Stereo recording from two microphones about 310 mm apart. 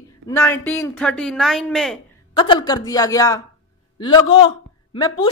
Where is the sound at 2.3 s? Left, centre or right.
Centre.